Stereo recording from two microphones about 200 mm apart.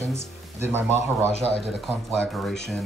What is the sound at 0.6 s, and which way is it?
Speech, 10° right (ahead or behind).